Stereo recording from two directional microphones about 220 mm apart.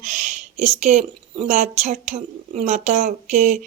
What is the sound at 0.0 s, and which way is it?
Speech, 35° right (ahead or behind).